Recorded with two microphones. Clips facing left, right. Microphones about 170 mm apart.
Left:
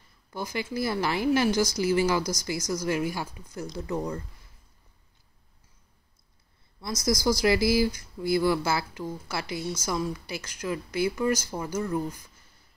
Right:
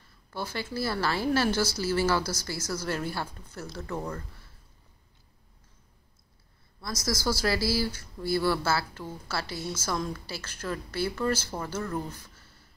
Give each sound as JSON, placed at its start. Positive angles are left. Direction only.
{"t": 0.3, "sound": "speech", "side_deg": 15}
{"t": 6.8, "sound": "speech", "side_deg": 20}